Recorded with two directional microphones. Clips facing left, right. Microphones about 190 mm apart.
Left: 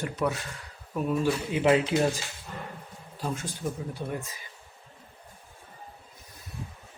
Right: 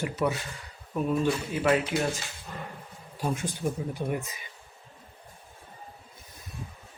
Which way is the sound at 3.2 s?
15° right (ahead or behind).